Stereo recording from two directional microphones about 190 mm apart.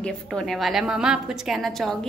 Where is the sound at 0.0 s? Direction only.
5° left (ahead or behind).